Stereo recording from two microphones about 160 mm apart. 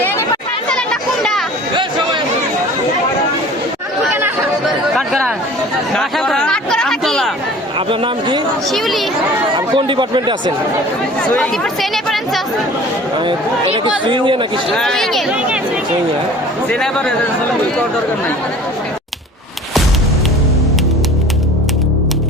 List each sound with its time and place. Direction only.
0.7 s chatter: 5° left (ahead or behind)
5.9 s a sound: 5° left (ahead or behind)
7.9 s a man's voice: 30° right (ahead or behind)
9.6 s speech: 30° right (ahead or behind)
11.3 s a woman's voice: centre (ahead or behind)
13.1 s a man's voice: 30° right (ahead or behind)
14.8 s a woman's voice: 5° left (ahead or behind)